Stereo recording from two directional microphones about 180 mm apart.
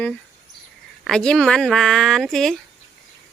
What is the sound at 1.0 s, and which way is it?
Speech, 5° left (ahead or behind).